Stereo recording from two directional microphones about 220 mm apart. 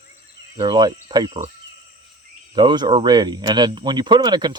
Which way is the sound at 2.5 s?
20° right (ahead or behind).